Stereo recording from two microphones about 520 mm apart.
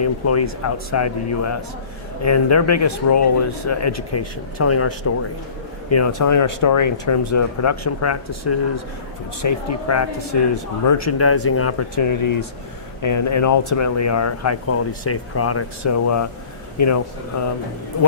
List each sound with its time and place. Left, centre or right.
0.0 s speech: left